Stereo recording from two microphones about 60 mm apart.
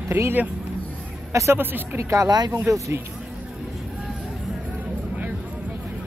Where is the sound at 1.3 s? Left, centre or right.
Right.